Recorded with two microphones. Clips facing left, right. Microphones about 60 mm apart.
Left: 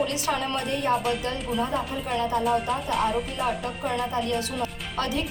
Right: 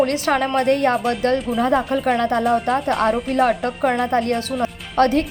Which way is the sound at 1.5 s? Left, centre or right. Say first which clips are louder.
Right 9 dB; right.